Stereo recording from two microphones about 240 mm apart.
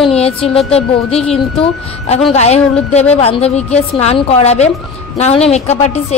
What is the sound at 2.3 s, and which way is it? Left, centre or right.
A woman's voice, left.